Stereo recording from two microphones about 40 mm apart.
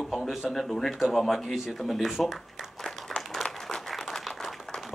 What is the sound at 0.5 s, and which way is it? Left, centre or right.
A man's voice, centre.